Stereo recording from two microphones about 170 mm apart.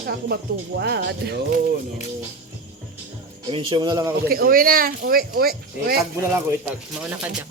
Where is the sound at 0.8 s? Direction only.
75° right (ahead or behind).